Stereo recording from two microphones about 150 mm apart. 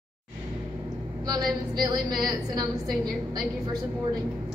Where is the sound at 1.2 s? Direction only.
25° right (ahead or behind).